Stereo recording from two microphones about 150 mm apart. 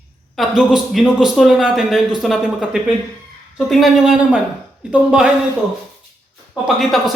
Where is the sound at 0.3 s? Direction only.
Centre (ahead or behind).